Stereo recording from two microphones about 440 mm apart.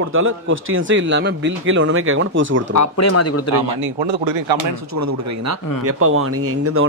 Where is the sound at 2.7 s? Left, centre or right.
Left.